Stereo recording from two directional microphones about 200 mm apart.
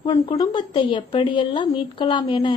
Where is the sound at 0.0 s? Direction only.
20° left (ahead or behind).